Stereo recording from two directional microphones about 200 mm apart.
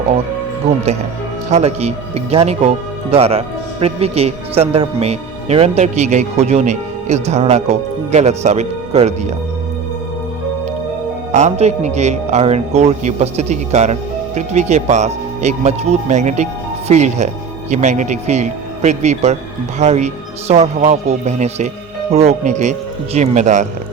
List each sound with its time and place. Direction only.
1.5 s speech: 30° right (ahead or behind)
11.3 s speech: 35° right (ahead or behind)